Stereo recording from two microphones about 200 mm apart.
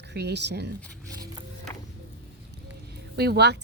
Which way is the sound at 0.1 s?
55° right (ahead or behind).